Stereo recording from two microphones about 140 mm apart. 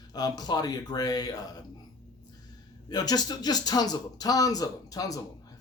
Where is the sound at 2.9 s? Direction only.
30° left (ahead or behind).